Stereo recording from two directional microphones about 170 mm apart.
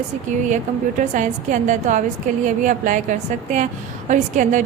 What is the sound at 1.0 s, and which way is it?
A woman's voice, 45° right (ahead or behind).